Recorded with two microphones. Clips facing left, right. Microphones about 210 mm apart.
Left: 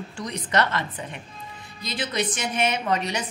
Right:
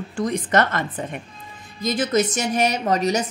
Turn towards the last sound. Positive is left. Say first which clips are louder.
# right 5 dB
turn(degrees=-40)  # may be behind; listen again after turning